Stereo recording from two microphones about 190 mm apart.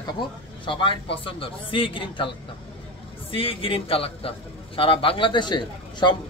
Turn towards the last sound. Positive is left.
turn(degrees=25)  # may be behind; listen again after turning